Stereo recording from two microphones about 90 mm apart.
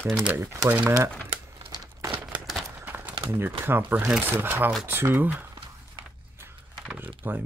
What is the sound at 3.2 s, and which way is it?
Speech, 25° right (ahead or behind).